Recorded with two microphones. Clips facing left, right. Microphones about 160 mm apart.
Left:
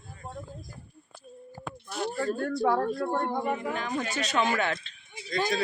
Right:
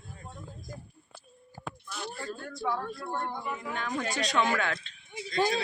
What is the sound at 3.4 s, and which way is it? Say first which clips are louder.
Speech: left 7 dB; 60° left (ahead or behind).